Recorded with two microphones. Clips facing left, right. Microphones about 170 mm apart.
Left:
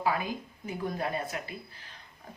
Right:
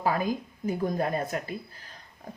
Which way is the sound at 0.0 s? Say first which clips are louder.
Right 3 dB; 40° right (ahead or behind).